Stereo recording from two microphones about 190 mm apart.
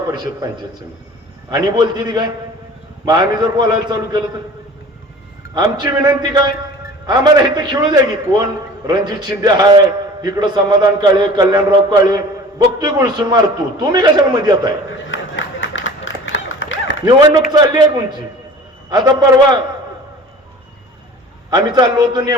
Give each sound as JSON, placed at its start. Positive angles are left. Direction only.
{"t": 0.1, "sound": "a man's voice", "side_deg": -20}
{"t": 5.5, "sound": "a man's voice", "side_deg": -25}
{"t": 15.1, "sound": "a sound", "side_deg": 80}
{"t": 17.1, "sound": "a man's voice", "side_deg": -20}
{"t": 21.5, "sound": "a man's voice", "side_deg": -20}